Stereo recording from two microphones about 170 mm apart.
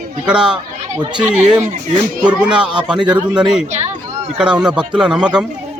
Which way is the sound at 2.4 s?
5° right (ahead or behind).